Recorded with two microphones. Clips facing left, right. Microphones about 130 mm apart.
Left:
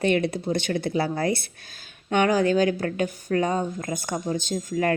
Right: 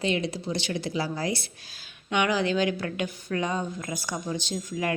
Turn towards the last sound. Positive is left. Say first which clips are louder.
# left 5 dB
turn(degrees=45)  # may be behind; listen again after turning